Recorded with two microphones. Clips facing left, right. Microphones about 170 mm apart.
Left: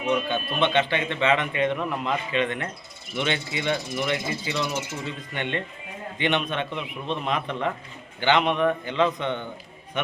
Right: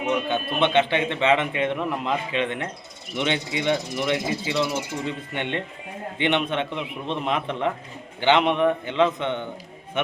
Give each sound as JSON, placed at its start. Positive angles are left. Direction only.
{"t": 0.1, "sound": "speech", "side_deg": -20}